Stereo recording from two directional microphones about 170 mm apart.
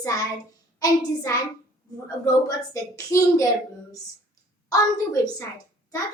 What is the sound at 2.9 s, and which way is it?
Speech, 20° left (ahead or behind).